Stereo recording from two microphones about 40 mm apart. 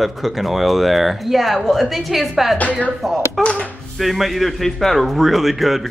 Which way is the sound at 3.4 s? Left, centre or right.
Left.